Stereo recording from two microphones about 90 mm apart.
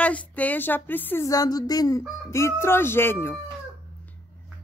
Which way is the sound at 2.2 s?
30° left (ahead or behind).